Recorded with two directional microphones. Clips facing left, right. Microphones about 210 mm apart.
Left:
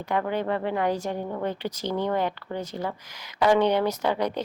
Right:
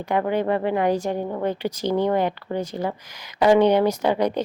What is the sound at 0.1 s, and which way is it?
Speech, 15° right (ahead or behind).